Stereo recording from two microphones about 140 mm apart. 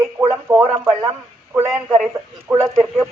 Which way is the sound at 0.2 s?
15° right (ahead or behind).